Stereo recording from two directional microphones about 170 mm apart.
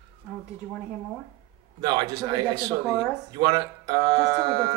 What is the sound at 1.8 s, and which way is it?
Speech, 25° right (ahead or behind).